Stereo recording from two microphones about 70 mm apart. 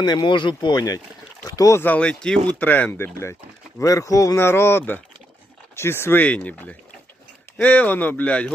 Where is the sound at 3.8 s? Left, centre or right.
Left.